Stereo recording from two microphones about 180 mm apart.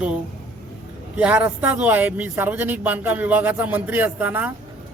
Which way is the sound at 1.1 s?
5° right (ahead or behind).